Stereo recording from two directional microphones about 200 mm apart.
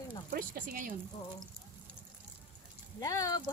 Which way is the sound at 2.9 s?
15° left (ahead or behind).